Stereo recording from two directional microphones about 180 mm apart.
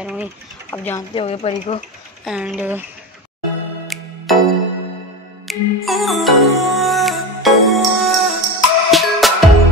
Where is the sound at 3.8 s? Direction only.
Centre (ahead or behind).